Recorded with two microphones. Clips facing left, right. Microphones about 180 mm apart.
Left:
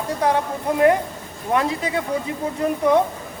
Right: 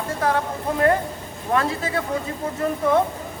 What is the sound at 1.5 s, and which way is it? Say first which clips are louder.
Speech: left 1 dB; 20° left (ahead or behind).